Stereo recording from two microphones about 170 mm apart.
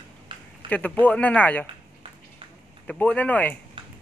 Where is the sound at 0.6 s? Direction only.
10° left (ahead or behind).